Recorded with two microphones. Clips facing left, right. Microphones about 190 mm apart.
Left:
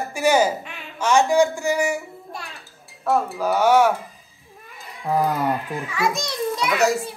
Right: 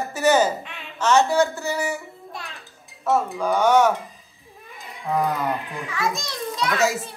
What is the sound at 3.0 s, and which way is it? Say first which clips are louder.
Speech: even; centre (ahead or behind).